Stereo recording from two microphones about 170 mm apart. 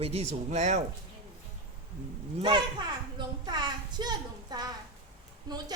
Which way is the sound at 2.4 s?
25° right (ahead or behind).